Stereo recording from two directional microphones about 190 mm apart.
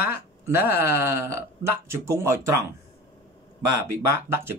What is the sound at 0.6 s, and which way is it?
A man's voice, 10° right (ahead or behind).